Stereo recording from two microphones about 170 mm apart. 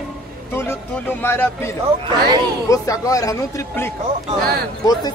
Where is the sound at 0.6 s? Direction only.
15° left (ahead or behind).